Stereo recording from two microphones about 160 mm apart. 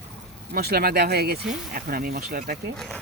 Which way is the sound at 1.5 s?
65° right (ahead or behind).